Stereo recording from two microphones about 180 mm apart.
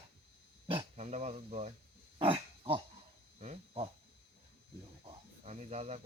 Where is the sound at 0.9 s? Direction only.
40° right (ahead or behind).